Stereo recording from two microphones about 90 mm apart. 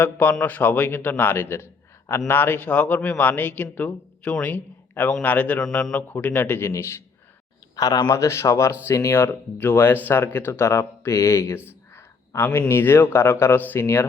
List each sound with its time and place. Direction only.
0.0 s a man's voice: 20° left (ahead or behind)
7.8 s speech: 40° left (ahead or behind)
11.7 s a sound: 30° left (ahead or behind)
12.5 s speech: 25° left (ahead or behind)